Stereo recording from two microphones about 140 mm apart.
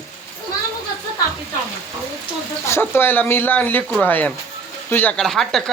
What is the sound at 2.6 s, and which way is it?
Speech, 20° left (ahead or behind).